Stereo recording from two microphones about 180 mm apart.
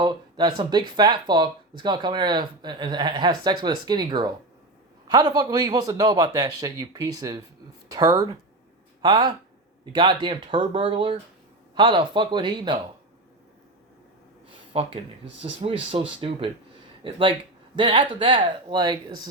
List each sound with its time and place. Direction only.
0.0 s speech: 25° right (ahead or behind)
14.7 s speech: 30° right (ahead or behind)